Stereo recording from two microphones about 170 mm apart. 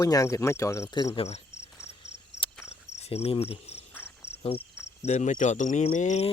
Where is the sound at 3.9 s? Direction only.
10° left (ahead or behind).